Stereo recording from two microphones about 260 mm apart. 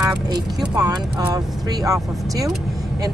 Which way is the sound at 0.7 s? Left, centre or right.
Centre.